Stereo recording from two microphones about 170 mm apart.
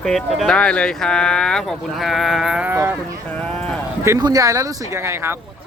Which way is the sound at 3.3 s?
5° left (ahead or behind).